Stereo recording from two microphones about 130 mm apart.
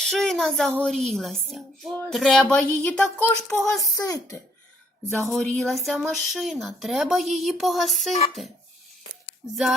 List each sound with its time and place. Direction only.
0.0 s speech: centre (ahead or behind)
3.8 s a child's voice: 25° left (ahead or behind)
5.3 s speech: 5° left (ahead or behind)